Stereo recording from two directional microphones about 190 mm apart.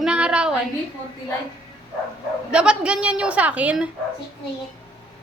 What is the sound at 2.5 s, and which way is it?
A woman's voice, 5° right (ahead or behind).